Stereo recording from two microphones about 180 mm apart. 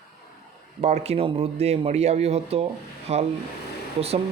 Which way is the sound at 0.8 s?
35° right (ahead or behind).